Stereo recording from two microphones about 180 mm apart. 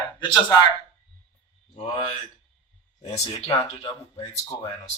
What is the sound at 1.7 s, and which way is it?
Speech, 25° left (ahead or behind).